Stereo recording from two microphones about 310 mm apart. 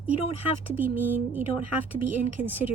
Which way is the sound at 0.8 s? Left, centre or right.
Centre.